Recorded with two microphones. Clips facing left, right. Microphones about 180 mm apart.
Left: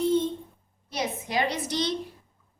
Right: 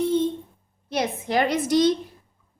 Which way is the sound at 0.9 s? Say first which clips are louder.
Right 6 dB; 60° right (ahead or behind).